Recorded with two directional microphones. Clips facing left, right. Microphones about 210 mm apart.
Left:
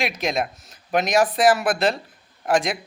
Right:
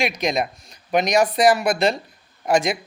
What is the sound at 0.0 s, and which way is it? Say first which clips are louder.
Speech: right 2 dB; centre (ahead or behind).